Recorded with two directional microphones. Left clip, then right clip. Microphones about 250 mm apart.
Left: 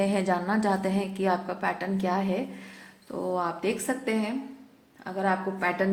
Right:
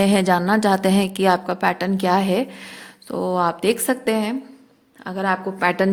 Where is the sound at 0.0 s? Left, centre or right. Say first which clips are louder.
Right 8 dB; right.